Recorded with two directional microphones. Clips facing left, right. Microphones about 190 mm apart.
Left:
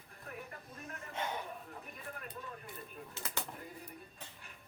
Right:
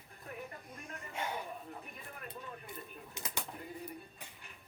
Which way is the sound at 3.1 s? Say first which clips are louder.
Even; 15° right (ahead or behind).